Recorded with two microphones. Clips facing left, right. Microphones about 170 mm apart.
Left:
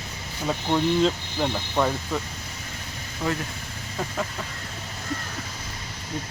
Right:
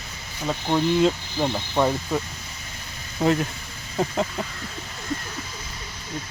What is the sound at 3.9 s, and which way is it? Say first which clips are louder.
Speech: right 6 dB; 25° right (ahead or behind).